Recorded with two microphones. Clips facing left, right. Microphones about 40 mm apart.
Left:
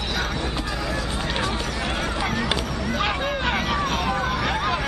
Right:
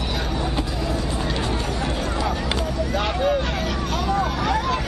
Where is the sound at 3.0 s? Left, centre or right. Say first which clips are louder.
Right 3 dB; centre.